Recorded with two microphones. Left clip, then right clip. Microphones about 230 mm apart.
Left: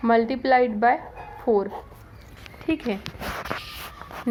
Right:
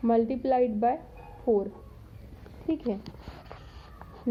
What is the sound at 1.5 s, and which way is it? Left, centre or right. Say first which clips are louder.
Speech: left 4 dB; left.